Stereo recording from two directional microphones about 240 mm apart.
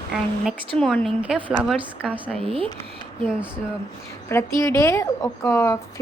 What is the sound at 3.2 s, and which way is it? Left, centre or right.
Speech, centre.